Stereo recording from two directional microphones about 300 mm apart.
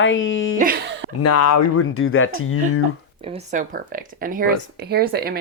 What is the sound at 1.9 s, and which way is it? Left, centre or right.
Speech, left.